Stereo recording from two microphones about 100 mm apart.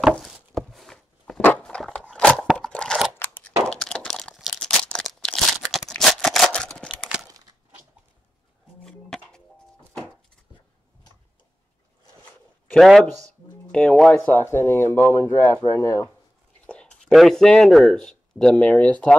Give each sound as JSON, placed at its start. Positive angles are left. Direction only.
{"t": 0.2, "sound": "walk", "side_deg": 0}
{"t": 1.4, "sound": "a sound", "side_deg": 15}
{"t": 2.5, "sound": "crunch", "side_deg": 10}
{"t": 3.2, "sound": "scissors", "side_deg": 20}
{"t": 3.6, "sound": "crumpling", "side_deg": 5}
{"t": 5.9, "sound": "a sound", "side_deg": 5}
{"t": 8.8, "sound": "music", "side_deg": 5}
{"t": 12.7, "sound": "speech", "side_deg": 0}
{"t": 14.3, "sound": "speech", "side_deg": 25}
{"t": 16.6, "sound": "a sound", "side_deg": 10}
{"t": 17.1, "sound": "speech", "side_deg": 0}